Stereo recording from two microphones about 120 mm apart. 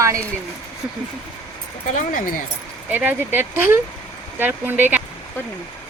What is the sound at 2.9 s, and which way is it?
Speech, 15° right (ahead or behind).